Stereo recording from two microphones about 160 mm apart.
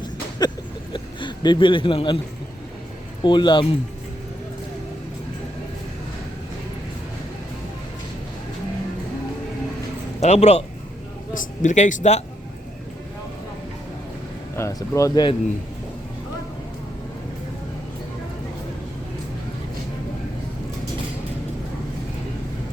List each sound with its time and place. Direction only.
0.0 s a sound: 25° left (ahead or behind)
0.9 s speech: 30° left (ahead or behind)
3.2 s speech: 30° left (ahead or behind)
10.2 s speech: 45° left (ahead or behind)
14.5 s speech: 20° left (ahead or behind)